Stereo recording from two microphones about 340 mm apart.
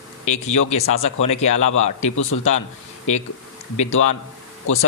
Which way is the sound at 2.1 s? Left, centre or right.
Left.